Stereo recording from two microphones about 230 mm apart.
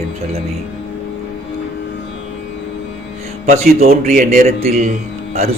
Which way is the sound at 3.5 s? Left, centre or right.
Right.